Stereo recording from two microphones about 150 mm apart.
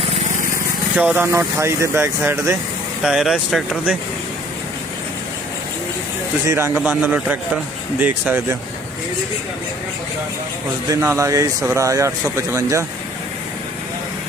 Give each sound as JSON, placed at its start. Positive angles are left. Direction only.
{"t": 0.9, "sound": "speech", "side_deg": -10}
{"t": 3.0, "sound": "speech", "side_deg": -5}
{"t": 6.4, "sound": "speech", "side_deg": -20}
{"t": 10.8, "sound": "speech", "side_deg": -20}